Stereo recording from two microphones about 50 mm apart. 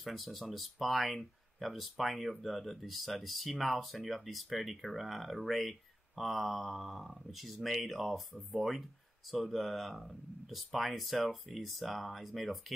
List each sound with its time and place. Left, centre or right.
0.0 s speech: centre